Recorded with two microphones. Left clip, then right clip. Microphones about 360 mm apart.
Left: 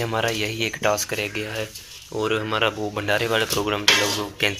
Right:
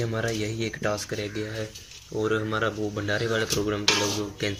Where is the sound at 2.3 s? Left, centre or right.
Centre.